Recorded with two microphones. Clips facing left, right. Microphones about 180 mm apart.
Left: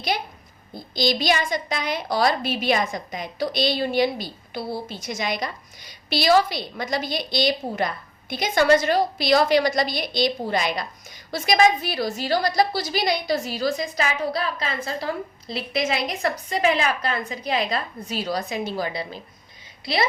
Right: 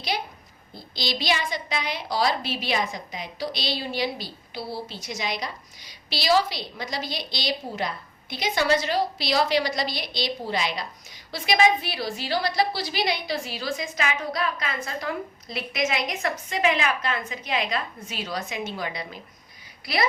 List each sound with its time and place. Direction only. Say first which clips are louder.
0.9 s a woman's voice: left 5 dB; 45° left (ahead or behind); by 20.1 s 25° left (ahead or behind)